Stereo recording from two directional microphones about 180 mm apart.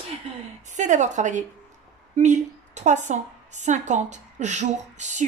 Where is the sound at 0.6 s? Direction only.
40° right (ahead or behind).